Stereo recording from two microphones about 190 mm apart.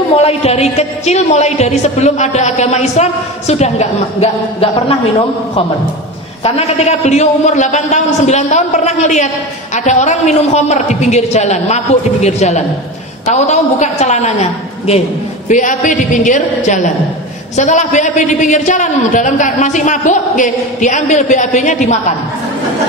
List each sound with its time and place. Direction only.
0.1 s a woman's voice: 30° left (ahead or behind)
6.4 s a woman's voice: 35° left (ahead or behind)